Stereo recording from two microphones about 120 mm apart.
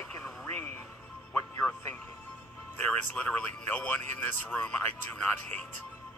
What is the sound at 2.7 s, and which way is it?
Speech, 15° left (ahead or behind).